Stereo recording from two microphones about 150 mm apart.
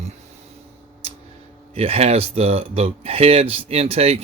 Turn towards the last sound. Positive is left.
turn(degrees=-45)  # may be behind; listen again after turning